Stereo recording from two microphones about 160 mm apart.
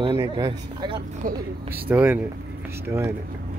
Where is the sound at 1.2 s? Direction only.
60° right (ahead or behind).